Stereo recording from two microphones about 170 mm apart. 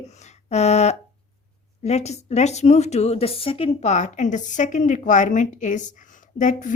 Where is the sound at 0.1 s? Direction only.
40° left (ahead or behind).